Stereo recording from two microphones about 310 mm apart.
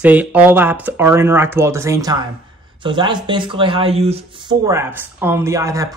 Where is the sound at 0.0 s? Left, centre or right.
Centre.